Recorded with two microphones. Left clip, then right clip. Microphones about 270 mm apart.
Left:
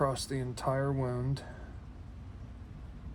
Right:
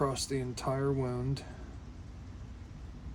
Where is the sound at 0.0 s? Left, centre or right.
Centre.